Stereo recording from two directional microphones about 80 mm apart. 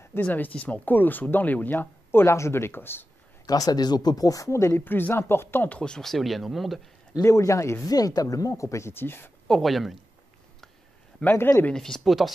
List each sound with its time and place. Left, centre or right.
0.2 s speech: centre
3.4 s speech: left
4.8 s speech: left
5.8 s speech: centre
7.2 s speech: left
7.9 s speech: left
9.5 s speech: centre
11.2 s speech: left
11.7 s speech: centre